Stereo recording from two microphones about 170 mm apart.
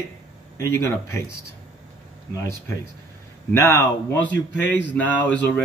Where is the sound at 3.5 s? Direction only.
15° left (ahead or behind).